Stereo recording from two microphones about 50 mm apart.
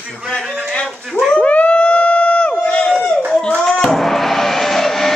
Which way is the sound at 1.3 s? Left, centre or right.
Left.